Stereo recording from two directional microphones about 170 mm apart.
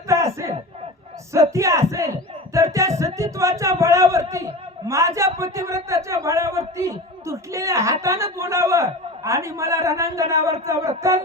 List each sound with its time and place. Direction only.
1.3 s a man's voice: 15° right (ahead or behind)